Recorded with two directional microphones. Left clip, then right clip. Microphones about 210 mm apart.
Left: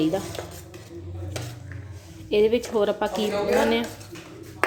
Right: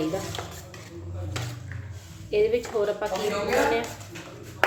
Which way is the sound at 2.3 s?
40° left (ahead or behind).